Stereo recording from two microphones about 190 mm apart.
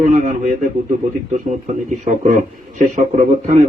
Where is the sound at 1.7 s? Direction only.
40° right (ahead or behind).